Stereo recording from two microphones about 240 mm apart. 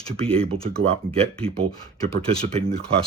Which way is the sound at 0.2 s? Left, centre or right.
Right.